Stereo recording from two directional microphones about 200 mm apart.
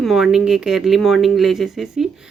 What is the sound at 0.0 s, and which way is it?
Speech, centre (ahead or behind).